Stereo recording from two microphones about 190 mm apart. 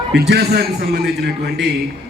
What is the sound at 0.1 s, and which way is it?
A woman's voice, 60° right (ahead or behind).